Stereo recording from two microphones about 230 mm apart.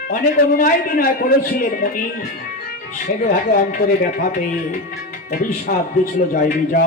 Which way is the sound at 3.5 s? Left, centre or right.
Left.